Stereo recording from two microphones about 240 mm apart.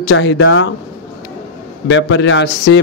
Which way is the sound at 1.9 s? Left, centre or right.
Left.